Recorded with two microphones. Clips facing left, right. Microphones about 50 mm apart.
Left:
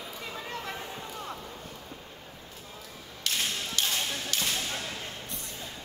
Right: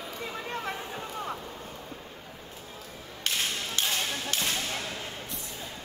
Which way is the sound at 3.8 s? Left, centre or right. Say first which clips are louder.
Even; right.